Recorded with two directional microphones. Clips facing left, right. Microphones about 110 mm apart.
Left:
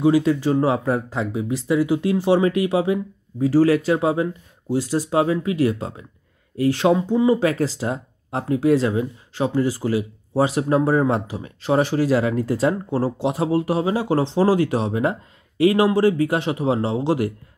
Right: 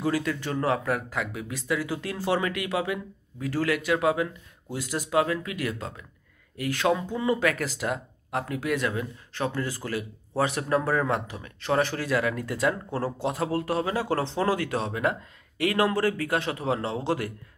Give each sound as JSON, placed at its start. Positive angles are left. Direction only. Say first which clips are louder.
{"t": 0.0, "sound": "speech", "louder": "left 10 dB", "side_deg": 25}